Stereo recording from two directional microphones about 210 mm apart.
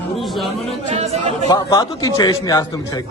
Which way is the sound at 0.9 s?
30° right (ahead or behind).